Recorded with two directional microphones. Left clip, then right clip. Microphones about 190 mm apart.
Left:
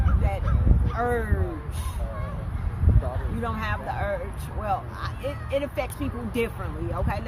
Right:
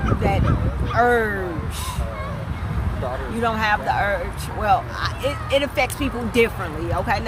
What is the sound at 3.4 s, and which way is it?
Speech, 20° right (ahead or behind).